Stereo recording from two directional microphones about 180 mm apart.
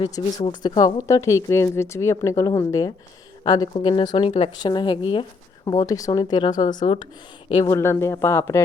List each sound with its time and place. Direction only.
0.0 s a woman's voice: 25° left (ahead or behind)
7.5 s a woman's voice: 20° left (ahead or behind)